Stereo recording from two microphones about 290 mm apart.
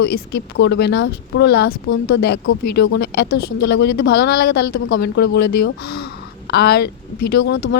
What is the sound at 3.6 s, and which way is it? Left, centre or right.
Speech, left.